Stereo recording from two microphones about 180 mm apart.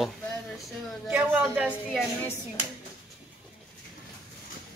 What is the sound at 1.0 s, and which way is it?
Speech, 5° right (ahead or behind).